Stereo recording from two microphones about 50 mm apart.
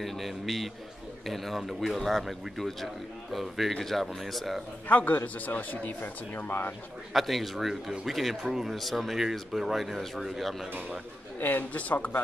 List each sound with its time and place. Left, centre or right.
0.0 s speech: centre
4.8 s a man's voice: left
7.2 s speech: centre
11.3 s a man's voice: left